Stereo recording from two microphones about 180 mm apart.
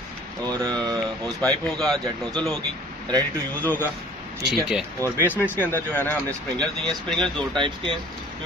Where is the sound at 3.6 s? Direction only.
10° left (ahead or behind).